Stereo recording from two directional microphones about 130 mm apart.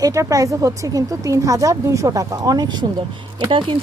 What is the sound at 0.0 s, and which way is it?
Speech, 25° right (ahead or behind).